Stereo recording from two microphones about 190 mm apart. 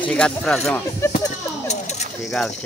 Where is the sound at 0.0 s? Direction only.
5° left (ahead or behind).